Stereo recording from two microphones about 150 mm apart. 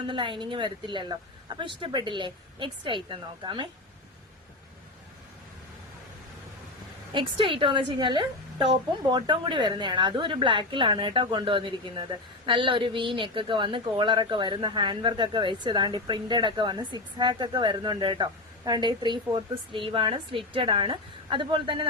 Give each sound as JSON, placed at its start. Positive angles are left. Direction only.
{"t": 0.1, "sound": "a woman's voice", "side_deg": -35}
{"t": 7.1, "sound": "a woman's voice", "side_deg": -35}